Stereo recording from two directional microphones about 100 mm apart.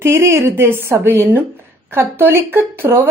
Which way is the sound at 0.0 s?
25° right (ahead or behind).